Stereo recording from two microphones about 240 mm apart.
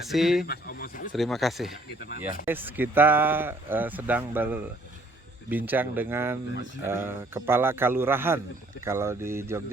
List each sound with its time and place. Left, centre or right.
0.1 s speech: centre
0.4 s speech: left
1.1 s speech: centre